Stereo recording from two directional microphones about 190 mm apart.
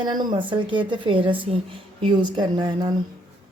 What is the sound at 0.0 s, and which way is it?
Speech, 25° right (ahead or behind).